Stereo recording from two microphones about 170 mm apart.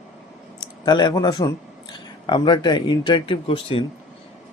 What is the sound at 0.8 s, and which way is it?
Speech, 25° left (ahead or behind).